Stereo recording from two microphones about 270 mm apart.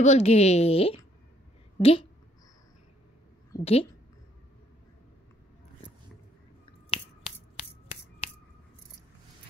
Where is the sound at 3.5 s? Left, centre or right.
Left.